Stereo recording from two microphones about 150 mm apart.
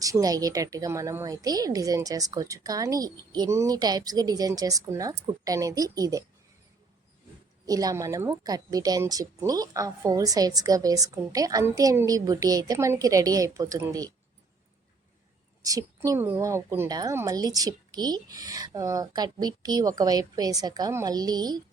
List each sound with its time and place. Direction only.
0.0 s a woman's voice: 25° right (ahead or behind)
7.6 s a woman's voice: 25° right (ahead or behind)
15.6 s a woman's voice: 25° right (ahead or behind)